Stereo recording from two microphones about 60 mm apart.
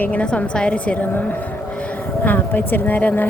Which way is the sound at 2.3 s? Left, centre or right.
Left.